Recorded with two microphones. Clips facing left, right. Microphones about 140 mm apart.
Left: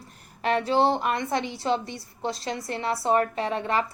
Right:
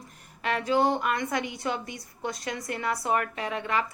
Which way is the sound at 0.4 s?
30° left (ahead or behind).